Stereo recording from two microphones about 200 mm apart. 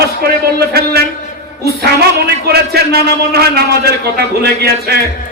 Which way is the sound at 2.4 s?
55° right (ahead or behind).